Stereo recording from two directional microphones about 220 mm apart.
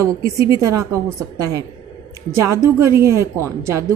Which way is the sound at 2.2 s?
15° right (ahead or behind).